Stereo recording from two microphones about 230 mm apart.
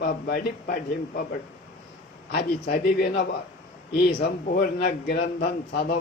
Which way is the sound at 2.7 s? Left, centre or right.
Left.